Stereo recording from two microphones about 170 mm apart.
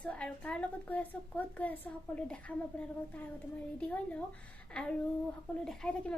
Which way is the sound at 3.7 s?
5° left (ahead or behind).